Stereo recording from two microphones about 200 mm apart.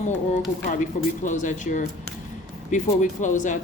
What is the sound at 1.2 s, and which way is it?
A woman's voice, 40° left (ahead or behind).